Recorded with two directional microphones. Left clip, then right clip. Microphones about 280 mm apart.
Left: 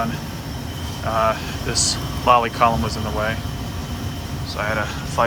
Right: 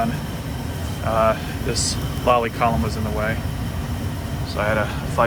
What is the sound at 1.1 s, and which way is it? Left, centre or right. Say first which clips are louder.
Speech: right 1 dB; centre.